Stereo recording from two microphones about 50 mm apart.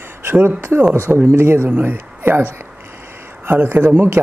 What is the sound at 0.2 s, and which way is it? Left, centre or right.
Speech, right.